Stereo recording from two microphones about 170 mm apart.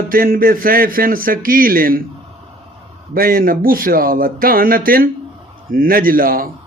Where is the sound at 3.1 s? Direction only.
60° right (ahead or behind).